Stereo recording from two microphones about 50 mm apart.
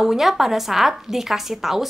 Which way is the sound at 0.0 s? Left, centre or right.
Centre.